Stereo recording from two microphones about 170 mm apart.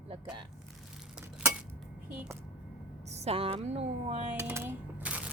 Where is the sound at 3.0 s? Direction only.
40° right (ahead or behind).